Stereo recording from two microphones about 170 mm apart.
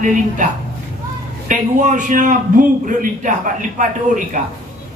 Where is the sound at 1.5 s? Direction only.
50° right (ahead or behind).